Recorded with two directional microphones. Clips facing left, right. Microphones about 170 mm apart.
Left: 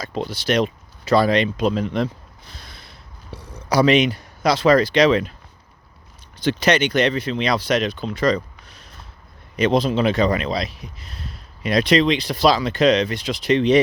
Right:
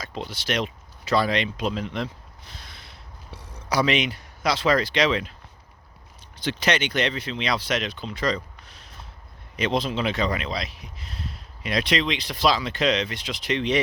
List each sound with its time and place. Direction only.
0.0 s speech: 40° left (ahead or behind)
2.5 s a sound: 35° left (ahead or behind)
3.3 s speech: 35° left (ahead or behind)
6.4 s speech: 45° left (ahead or behind)